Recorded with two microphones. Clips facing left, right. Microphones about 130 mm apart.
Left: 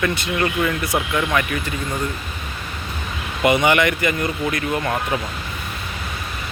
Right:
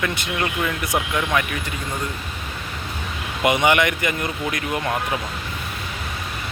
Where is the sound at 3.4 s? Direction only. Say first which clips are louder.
Left 2 dB; 15° right (ahead or behind).